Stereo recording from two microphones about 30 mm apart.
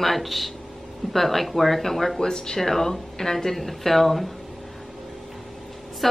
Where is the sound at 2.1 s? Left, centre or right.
Left.